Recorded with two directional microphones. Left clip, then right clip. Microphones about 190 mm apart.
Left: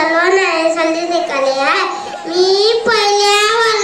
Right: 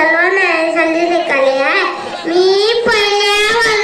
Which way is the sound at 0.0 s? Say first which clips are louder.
Right 1 dB; 40° right (ahead or behind).